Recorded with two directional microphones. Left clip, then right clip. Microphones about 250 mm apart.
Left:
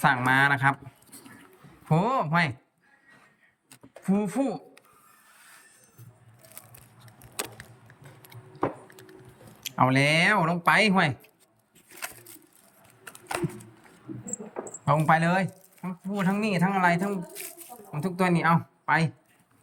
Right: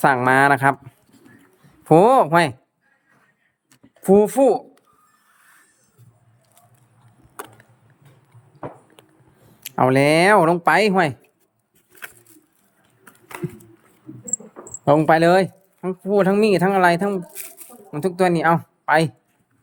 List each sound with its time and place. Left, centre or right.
0.0 s speech: centre
1.8 s speech: right
4.0 s speech: right
9.6 s speech: centre
14.8 s speech: right
18.0 s speech: centre